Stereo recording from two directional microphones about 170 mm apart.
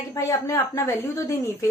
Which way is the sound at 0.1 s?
20° left (ahead or behind).